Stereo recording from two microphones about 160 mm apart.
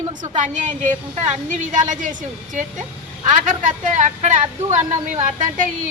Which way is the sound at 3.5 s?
55° right (ahead or behind).